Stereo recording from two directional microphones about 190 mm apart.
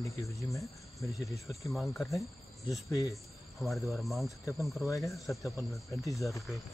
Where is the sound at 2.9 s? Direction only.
15° left (ahead or behind).